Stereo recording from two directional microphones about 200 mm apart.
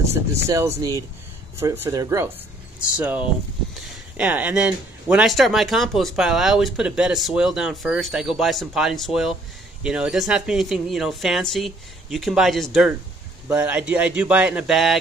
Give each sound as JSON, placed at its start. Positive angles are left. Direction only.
{"t": 0.7, "sound": "a man's voice", "side_deg": -15}